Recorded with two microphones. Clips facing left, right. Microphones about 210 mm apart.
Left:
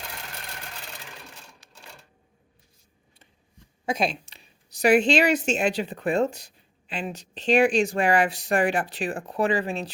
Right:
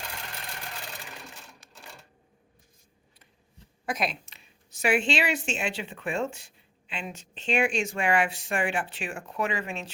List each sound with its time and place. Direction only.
1.6 s cash register: 50° right (ahead or behind)
3.8 s a woman's voice: 30° left (ahead or behind)